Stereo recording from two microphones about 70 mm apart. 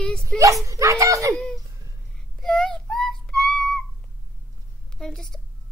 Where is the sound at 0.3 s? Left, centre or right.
Centre.